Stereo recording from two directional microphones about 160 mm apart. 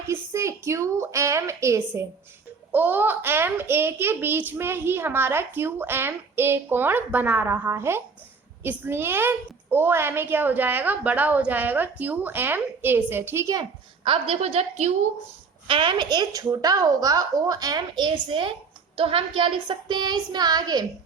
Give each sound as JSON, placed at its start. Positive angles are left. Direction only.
{"t": 0.1, "sound": "a woman's voice", "side_deg": -15}
{"t": 14.0, "sound": "a woman's voice", "side_deg": -35}
{"t": 15.6, "sound": "a woman's voice", "side_deg": -30}